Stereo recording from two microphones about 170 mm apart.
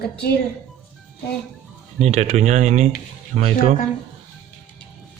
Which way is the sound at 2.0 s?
40° right (ahead or behind).